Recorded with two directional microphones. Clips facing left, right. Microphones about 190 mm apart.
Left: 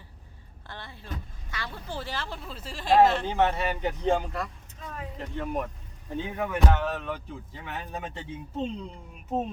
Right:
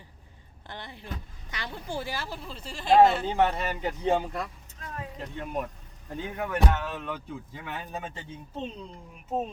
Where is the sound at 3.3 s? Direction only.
10° right (ahead or behind).